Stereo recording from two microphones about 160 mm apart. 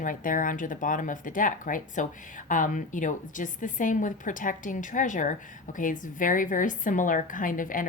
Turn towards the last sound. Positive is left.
turn(degrees=55)  # may be behind; listen again after turning